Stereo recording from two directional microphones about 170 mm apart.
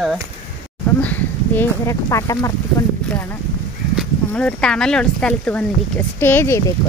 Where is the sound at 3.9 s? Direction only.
5° left (ahead or behind).